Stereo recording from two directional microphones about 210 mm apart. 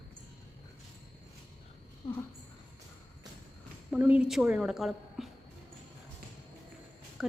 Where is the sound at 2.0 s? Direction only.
20° left (ahead or behind).